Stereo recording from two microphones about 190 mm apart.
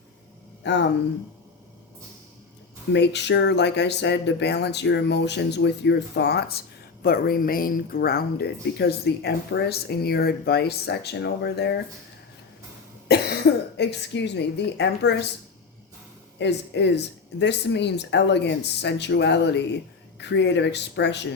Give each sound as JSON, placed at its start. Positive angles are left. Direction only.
{"t": 0.6, "sound": "speech", "side_deg": 65}
{"t": 2.9, "sound": "speech", "side_deg": 65}
{"t": 13.1, "sound": "speech", "side_deg": 60}
{"t": 16.4, "sound": "speech", "side_deg": 65}